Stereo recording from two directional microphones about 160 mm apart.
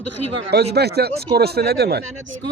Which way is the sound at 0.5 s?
90° right.